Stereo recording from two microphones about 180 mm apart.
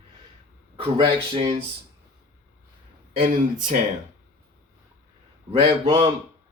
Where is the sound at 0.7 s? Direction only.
30° right (ahead or behind).